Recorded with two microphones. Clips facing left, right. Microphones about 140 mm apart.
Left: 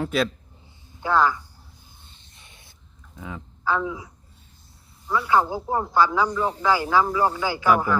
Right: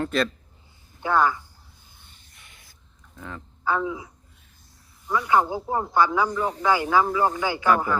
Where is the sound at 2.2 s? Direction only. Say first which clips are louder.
Left 2 dB; 25° left (ahead or behind).